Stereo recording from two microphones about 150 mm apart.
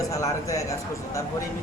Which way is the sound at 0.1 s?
20° left (ahead or behind).